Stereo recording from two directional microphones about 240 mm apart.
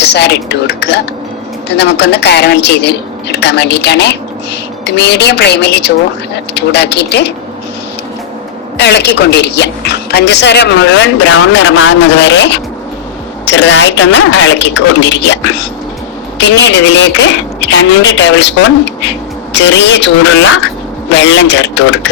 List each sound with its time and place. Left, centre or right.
0.0 s a woman's voice: left
8.8 s a woman's voice: left